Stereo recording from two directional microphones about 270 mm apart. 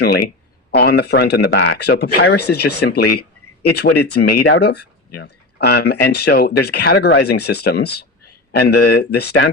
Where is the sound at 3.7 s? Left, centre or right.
Left.